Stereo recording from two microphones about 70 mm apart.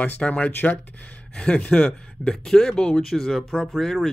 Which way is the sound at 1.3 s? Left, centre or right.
Centre.